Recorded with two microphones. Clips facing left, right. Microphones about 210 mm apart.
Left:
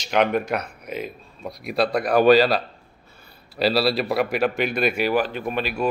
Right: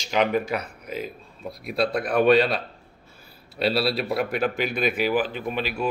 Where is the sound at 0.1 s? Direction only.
60° left (ahead or behind).